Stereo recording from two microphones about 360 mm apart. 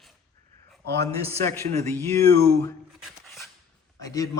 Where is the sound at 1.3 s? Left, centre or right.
Centre.